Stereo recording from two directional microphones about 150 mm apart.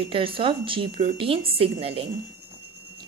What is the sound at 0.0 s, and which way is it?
A woman's voice, 35° right (ahead or behind).